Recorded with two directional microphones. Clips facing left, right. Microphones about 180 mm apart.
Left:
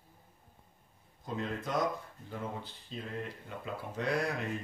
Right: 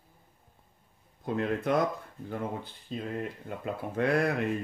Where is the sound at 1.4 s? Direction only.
60° right (ahead or behind).